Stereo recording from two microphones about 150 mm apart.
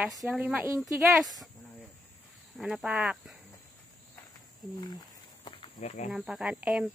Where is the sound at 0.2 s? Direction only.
10° right (ahead or behind).